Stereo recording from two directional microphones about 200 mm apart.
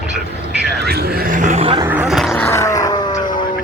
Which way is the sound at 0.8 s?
40° right (ahead or behind).